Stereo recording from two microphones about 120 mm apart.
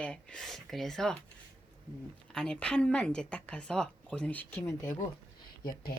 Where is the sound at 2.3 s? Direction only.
5° left (ahead or behind).